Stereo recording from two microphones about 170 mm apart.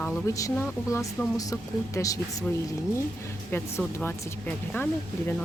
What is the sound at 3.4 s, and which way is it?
Speech, 10° left (ahead or behind).